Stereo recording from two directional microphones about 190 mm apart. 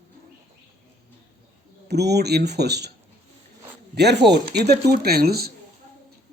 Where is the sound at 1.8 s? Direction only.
60° right (ahead or behind).